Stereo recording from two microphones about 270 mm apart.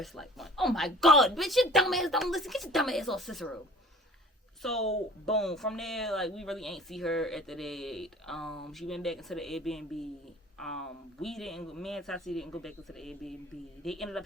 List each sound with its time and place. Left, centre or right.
0.0 s speech: centre
4.6 s speech: centre